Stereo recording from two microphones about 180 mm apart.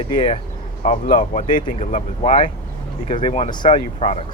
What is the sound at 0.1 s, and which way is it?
Speech, 45° left (ahead or behind).